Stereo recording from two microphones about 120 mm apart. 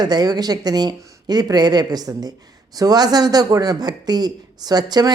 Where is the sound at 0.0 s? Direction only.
35° right (ahead or behind).